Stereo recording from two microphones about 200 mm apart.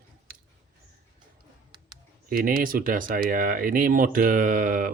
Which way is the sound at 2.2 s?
45° right (ahead or behind).